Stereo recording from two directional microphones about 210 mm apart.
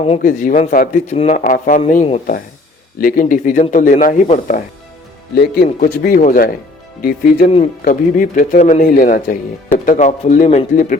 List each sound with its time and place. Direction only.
0.0 s speech: 35° left (ahead or behind)
1.5 s speech: 40° left (ahead or behind)
5.3 s speech: 50° left (ahead or behind)